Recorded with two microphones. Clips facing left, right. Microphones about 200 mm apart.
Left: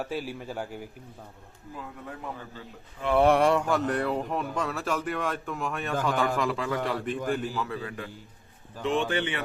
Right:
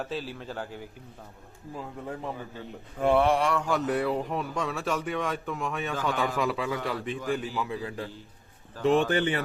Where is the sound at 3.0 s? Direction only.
55° right (ahead or behind).